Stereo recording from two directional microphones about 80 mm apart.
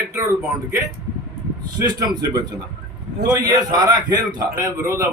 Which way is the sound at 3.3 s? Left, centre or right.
Right.